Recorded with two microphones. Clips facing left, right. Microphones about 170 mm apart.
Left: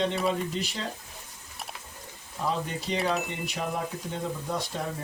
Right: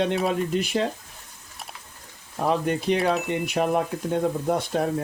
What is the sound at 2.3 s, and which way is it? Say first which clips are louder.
Speech: right 7 dB; 60° right (ahead or behind).